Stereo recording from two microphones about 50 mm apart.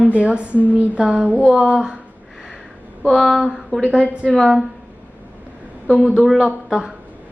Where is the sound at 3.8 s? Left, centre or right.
Right.